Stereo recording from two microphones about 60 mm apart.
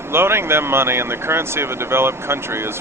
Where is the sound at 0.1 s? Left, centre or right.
Right.